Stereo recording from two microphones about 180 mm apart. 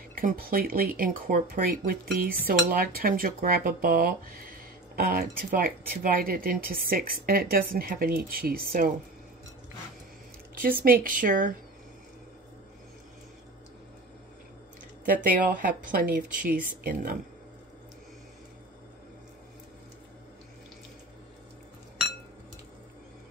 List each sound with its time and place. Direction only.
0.1 s speech: 50° right (ahead or behind)
10.8 s speech: 50° right (ahead or behind)
15.0 s speech: 50° right (ahead or behind)